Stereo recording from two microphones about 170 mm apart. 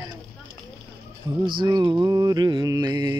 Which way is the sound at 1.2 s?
15° right (ahead or behind).